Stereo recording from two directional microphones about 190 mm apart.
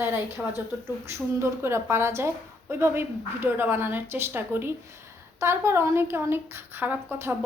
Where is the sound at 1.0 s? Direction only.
15° right (ahead or behind).